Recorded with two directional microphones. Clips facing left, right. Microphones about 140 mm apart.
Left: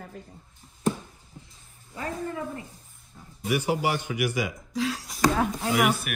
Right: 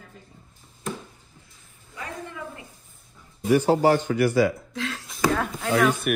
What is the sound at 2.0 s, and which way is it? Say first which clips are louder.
Speech: left 4 dB; 35° left (ahead or behind).